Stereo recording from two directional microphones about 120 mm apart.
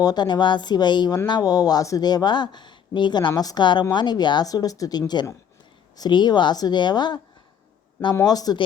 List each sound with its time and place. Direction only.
0.0 s speech: 35° left (ahead or behind)
8.2 s speech: 30° left (ahead or behind)